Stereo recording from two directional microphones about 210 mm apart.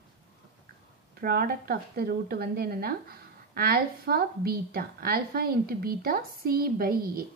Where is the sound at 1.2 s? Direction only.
45° right (ahead or behind).